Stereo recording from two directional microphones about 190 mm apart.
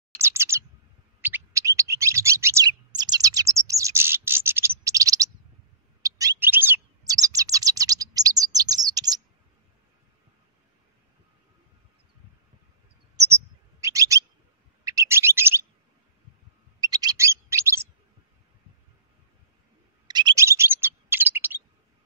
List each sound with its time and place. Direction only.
0.2 s bird: 15° right (ahead or behind)
6.0 s chirp: 20° right (ahead or behind)
13.1 s bird: 15° right (ahead or behind)
16.8 s bird: 20° right (ahead or behind)
20.1 s bird: 20° right (ahead or behind)